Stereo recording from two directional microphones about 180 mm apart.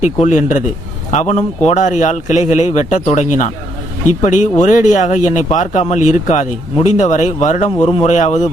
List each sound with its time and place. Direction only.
0.0 s speech: 40° left (ahead or behind)